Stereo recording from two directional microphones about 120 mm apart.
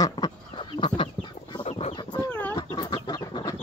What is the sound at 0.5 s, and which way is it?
Chicken, 45° left (ahead or behind).